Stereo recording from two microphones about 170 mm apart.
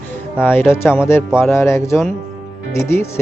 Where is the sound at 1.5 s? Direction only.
15° left (ahead or behind).